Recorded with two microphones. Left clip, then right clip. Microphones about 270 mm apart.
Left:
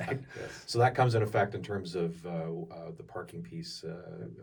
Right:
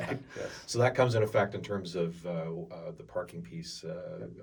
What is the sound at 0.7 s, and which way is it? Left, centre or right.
Speech, centre.